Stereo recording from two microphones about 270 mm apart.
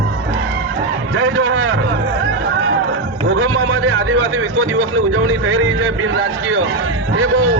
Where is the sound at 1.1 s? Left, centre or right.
Right.